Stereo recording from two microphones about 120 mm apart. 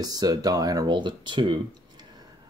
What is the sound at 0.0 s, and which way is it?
Speech, 30° right (ahead or behind).